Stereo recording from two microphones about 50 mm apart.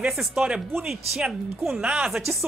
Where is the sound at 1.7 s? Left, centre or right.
Right.